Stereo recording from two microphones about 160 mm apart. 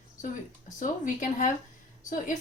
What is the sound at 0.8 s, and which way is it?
Speech, 55° left (ahead or behind).